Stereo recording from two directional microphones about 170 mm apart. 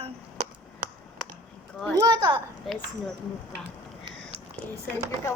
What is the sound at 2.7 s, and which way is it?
Speech, centre (ahead or behind).